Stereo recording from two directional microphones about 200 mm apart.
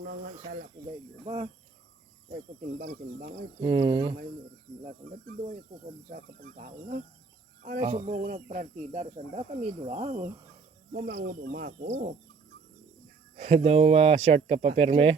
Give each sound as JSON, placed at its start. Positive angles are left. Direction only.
{"t": 1.2, "sound": "speech", "side_deg": -25}
{"t": 2.3, "sound": "speech", "side_deg": -40}
{"t": 3.6, "sound": "speech", "side_deg": -25}
{"t": 6.6, "sound": "speech", "side_deg": -40}
{"t": 11.1, "sound": "speech", "side_deg": -50}
{"t": 13.3, "sound": "speech", "side_deg": -35}